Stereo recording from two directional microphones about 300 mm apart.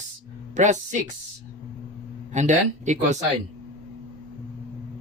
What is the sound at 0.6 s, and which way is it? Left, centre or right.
Speech, right.